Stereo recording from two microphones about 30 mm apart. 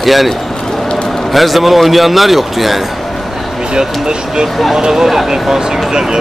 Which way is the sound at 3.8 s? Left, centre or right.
Right.